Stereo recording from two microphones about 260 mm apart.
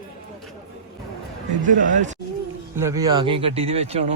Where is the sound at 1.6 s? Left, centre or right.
Right.